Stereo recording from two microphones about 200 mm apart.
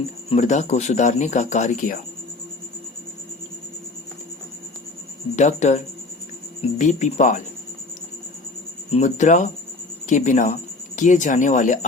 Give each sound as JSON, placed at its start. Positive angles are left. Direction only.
{"t": 0.3, "sound": "speech", "side_deg": 35}
{"t": 5.4, "sound": "speech", "side_deg": 35}
{"t": 8.9, "sound": "speech", "side_deg": 35}